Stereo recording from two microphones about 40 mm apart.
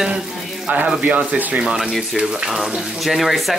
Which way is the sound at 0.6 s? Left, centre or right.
Right.